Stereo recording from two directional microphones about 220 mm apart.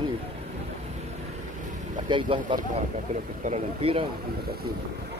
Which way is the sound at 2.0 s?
20° right (ahead or behind).